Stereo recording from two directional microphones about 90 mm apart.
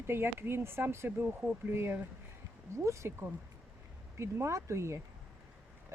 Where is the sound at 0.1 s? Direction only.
25° right (ahead or behind).